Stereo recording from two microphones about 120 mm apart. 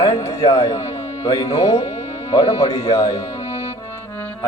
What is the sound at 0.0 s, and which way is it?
Speech, 25° left (ahead or behind).